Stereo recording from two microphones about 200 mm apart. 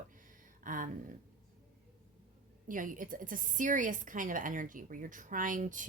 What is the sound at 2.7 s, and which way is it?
A woman's voice, 40° right (ahead or behind).